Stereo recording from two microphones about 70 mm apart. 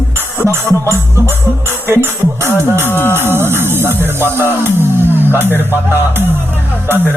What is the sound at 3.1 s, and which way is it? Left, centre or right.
Music, right.